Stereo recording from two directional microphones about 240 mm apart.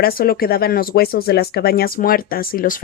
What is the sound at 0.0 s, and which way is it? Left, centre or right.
Speech, left.